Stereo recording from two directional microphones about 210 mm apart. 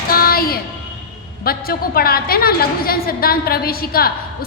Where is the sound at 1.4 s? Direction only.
45° left (ahead or behind).